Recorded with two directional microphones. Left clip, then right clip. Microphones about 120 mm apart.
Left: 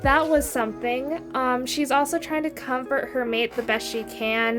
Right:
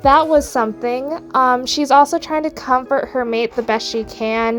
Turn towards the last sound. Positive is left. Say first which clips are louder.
# right 5 dB
turn(degrees=-40)  # may be behind; listen again after turning